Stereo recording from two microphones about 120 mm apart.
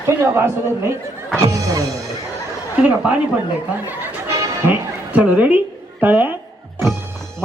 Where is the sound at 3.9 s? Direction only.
15° right (ahead or behind).